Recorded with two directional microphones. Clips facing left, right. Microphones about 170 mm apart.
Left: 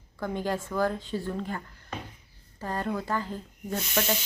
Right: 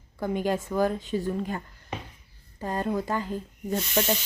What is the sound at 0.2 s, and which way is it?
Speech, 15° right (ahead or behind).